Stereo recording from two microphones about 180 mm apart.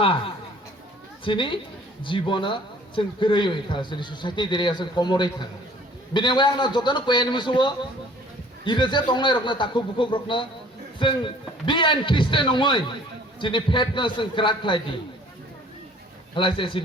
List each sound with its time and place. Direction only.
1.2 s speech: 25° left (ahead or behind)
16.3 s speech: 30° left (ahead or behind)